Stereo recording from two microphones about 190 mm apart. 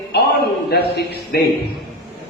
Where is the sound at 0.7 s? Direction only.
60° left (ahead or behind).